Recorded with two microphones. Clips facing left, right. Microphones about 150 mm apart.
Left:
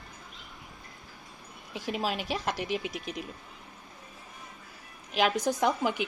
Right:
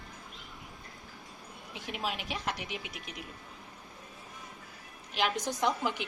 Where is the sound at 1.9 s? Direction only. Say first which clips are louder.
Left 5 dB; 40° left (ahead or behind).